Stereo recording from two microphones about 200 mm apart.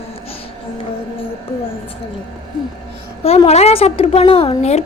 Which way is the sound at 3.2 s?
30° left (ahead or behind).